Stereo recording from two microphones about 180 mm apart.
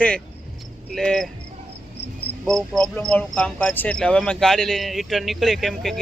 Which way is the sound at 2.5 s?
5° left (ahead or behind).